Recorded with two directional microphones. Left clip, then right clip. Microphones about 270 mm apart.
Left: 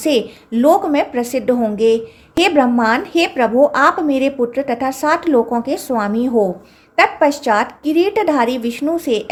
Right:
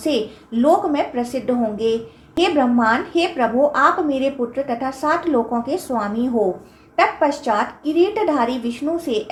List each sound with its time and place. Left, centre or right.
0.0 s a woman's voice: left